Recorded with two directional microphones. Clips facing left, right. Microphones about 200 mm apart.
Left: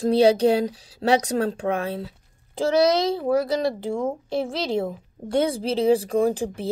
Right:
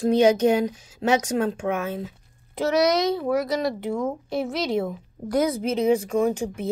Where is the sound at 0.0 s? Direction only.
35° left (ahead or behind).